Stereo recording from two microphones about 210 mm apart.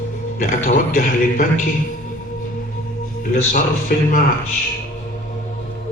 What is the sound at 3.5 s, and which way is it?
Speech, 40° left (ahead or behind).